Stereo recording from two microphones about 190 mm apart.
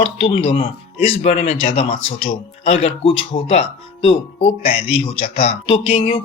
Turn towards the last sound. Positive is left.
turn(degrees=30)  # may be behind; listen again after turning